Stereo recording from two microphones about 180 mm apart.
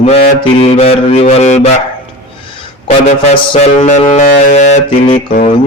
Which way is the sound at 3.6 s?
40° left (ahead or behind).